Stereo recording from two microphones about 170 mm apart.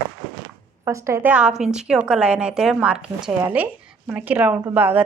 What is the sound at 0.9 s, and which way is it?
A woman's voice, 15° right (ahead or behind).